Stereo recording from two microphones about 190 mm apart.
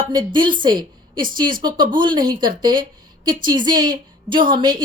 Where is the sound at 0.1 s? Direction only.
25° right (ahead or behind).